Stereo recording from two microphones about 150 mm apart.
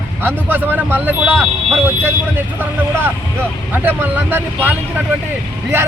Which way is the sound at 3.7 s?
10° right (ahead or behind).